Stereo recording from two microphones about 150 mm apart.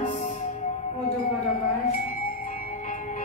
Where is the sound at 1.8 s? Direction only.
65° left (ahead or behind).